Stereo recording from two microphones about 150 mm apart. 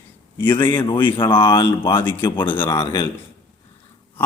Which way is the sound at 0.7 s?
30° left (ahead or behind).